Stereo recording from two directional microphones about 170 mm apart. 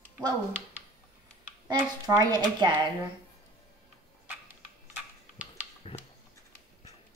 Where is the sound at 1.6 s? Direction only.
20° right (ahead or behind).